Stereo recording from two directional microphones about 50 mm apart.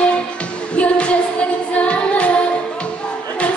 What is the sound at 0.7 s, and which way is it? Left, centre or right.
Music of asia, left.